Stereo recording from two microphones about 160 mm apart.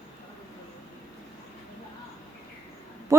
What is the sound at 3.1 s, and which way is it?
Speech, 20° right (ahead or behind).